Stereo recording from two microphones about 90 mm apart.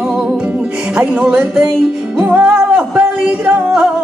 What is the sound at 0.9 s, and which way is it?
Music, 10° right (ahead or behind).